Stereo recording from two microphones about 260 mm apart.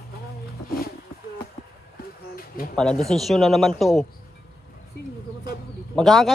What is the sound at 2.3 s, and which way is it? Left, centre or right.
Bird, left.